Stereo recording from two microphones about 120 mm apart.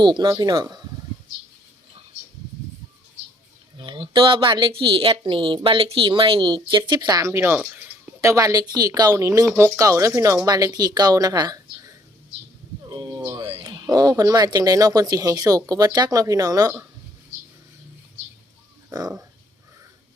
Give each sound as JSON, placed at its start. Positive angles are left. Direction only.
{"t": 0.0, "sound": "speech", "side_deg": -40}
{"t": 3.8, "sound": "a woman's voice", "side_deg": -40}
{"t": 12.9, "sound": "a sound", "side_deg": -35}
{"t": 13.7, "sound": "speech", "side_deg": -35}
{"t": 18.9, "sound": "speech", "side_deg": -30}